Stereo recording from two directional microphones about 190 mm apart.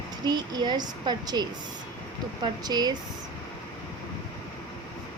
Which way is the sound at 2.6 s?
20° right (ahead or behind).